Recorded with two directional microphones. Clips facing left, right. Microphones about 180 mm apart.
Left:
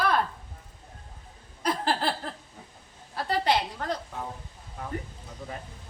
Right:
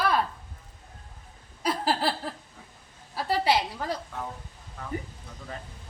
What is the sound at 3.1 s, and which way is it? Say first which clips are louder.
Speech: right 1 dB; 5° right (ahead or behind).